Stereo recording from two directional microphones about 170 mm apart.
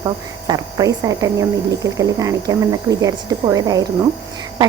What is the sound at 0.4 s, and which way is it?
Speech, 20° right (ahead or behind).